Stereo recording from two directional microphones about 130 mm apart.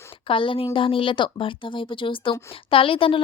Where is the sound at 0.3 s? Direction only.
40° left (ahead or behind).